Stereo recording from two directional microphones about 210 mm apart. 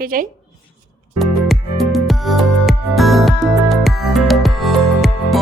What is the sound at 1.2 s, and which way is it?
Music, centre (ahead or behind).